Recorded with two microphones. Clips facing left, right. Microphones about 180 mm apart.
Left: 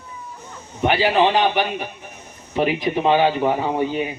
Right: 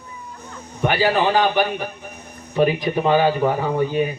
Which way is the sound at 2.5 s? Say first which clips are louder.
Right 2 dB; 20° left (ahead or behind).